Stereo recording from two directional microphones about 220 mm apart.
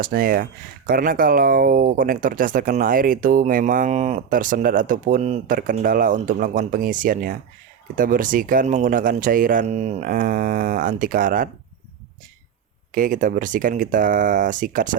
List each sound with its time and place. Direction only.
0.0 s speech: 40° right (ahead or behind)
12.9 s speech: 35° right (ahead or behind)